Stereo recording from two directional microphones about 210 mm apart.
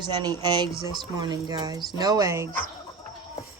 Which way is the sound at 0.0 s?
20° right (ahead or behind).